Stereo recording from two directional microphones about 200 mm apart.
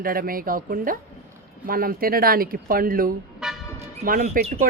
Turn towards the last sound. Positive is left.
turn(degrees=-45)  # may be behind; listen again after turning